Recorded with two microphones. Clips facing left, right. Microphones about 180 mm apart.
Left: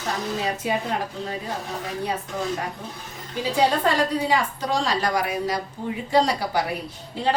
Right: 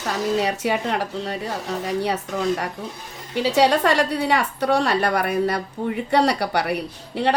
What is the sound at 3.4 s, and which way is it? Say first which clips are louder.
A woman's voice: right 4 dB; 75° right (ahead or behind).